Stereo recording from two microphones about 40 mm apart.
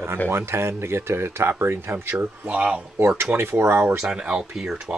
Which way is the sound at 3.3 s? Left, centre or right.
Right.